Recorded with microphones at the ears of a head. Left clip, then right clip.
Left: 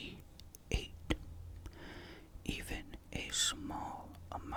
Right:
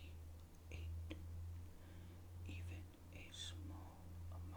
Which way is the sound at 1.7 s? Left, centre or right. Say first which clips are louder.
Left 18 dB; left.